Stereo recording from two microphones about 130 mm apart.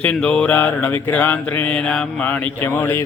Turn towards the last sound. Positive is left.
turn(degrees=20)  # may be behind; listen again after turning